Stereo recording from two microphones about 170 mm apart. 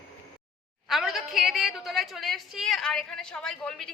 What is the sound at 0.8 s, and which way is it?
A woman's voice, centre (ahead or behind).